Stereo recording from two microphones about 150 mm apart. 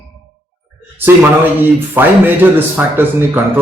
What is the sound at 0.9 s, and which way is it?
Speech, 15° right (ahead or behind).